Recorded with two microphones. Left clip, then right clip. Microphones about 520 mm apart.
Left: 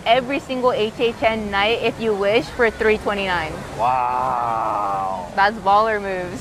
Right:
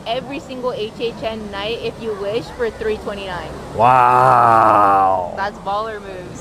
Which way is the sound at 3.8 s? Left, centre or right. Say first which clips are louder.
Right 8 dB; right.